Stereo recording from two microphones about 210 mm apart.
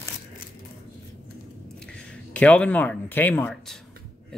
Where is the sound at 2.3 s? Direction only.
5° left (ahead or behind).